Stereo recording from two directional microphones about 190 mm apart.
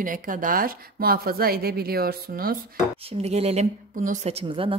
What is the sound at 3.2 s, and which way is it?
A woman's voice, 35° right (ahead or behind).